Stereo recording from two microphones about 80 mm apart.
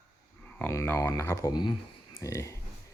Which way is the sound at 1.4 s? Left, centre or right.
Left.